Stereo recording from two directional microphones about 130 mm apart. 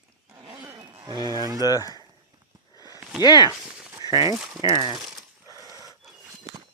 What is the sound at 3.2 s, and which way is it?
Speech, 30° left (ahead or behind).